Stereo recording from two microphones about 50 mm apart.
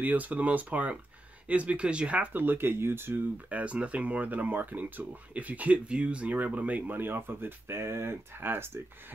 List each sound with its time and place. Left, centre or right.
0.0 s speech: right
2.3 s speech: right
3.4 s speech: right
6.3 s speech: right
7.0 s speech: right